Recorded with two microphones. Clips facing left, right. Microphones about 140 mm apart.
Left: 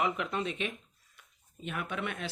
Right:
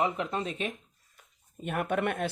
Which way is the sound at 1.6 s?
50° right (ahead or behind).